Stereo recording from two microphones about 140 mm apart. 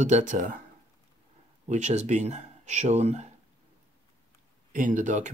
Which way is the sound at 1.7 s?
55° right (ahead or behind).